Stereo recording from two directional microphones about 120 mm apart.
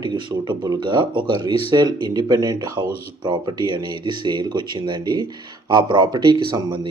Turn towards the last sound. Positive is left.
turn(degrees=-40)  # may be behind; listen again after turning